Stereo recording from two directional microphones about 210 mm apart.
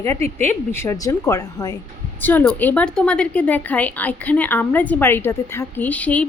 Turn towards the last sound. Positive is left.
turn(degrees=5)  # may be behind; listen again after turning